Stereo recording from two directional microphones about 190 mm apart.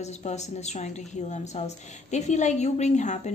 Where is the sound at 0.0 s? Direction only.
35° left (ahead or behind).